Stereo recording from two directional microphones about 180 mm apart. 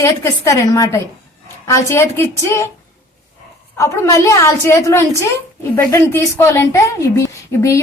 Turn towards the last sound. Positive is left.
turn(degrees=15)  # may be behind; listen again after turning